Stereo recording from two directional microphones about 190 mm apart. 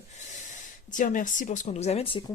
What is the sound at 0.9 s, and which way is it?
Speech, 45° left (ahead or behind).